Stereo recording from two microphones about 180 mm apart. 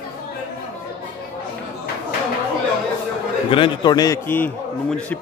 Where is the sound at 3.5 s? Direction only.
25° left (ahead or behind); by 5.1 s 5° left (ahead or behind).